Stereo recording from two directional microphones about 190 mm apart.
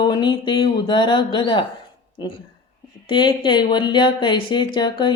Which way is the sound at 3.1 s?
25° left (ahead or behind).